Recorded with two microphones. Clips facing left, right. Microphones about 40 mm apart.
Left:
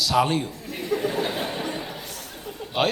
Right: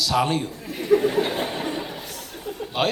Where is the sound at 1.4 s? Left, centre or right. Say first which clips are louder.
Right 2 dB; right.